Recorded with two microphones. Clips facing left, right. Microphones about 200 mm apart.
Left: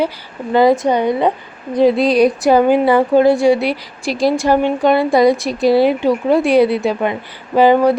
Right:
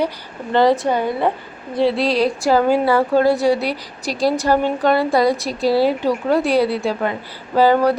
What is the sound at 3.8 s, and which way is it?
Speech, 40° right (ahead or behind).